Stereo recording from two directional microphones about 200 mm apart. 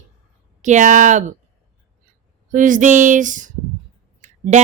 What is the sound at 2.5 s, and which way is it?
Speech, 40° right (ahead or behind).